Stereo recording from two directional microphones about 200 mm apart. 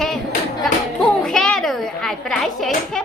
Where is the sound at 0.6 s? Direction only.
Centre (ahead or behind).